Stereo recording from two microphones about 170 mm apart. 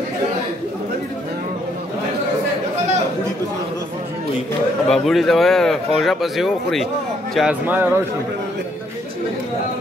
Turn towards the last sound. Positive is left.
turn(degrees=-10)  # may be behind; listen again after turning